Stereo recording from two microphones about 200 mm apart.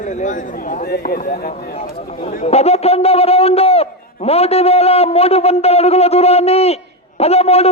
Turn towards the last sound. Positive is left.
turn(degrees=30)  # may be behind; listen again after turning